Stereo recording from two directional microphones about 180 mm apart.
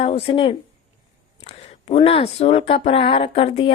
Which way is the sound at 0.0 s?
30° left (ahead or behind).